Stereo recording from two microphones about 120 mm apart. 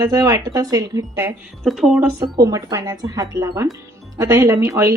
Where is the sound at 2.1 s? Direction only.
30° right (ahead or behind).